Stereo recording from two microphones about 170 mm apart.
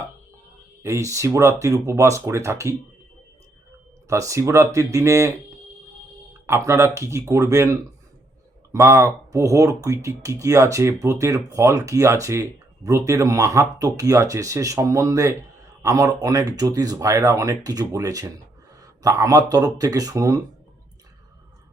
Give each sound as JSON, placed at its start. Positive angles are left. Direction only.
{"t": 0.8, "sound": "speech", "side_deg": -15}
{"t": 4.1, "sound": "speech", "side_deg": -20}
{"t": 6.5, "sound": "speech", "side_deg": -15}